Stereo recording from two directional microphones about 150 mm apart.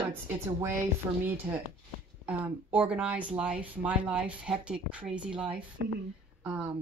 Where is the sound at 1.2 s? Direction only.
15° right (ahead or behind).